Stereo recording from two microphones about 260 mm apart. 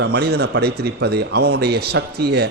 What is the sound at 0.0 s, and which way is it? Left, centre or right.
Speech, right.